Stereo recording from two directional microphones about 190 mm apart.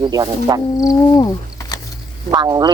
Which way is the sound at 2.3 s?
20° right (ahead or behind).